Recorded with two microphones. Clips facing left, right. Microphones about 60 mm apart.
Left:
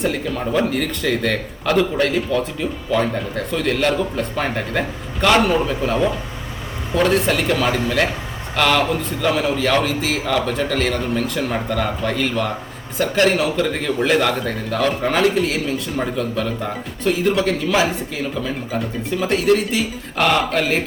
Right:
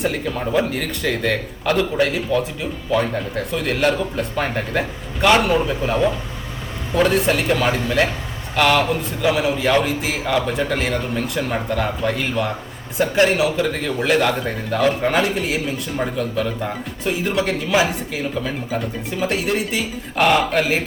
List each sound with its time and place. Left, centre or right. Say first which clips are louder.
0.0 s a man's voice: left 1 dB; centre
17.7 s a man's voice: even; centre